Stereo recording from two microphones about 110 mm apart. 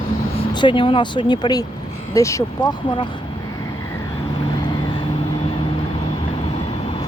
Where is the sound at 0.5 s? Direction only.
45° left (ahead or behind).